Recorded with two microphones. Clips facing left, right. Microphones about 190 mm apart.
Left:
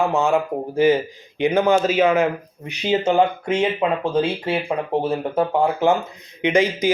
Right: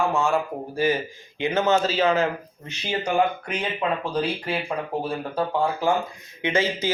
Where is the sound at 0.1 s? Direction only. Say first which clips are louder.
Left 4 dB; 20° left (ahead or behind).